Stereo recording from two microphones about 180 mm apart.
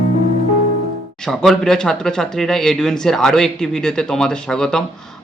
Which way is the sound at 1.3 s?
5° left (ahead or behind).